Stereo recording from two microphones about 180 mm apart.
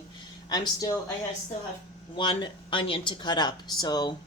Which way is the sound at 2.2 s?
25° left (ahead or behind).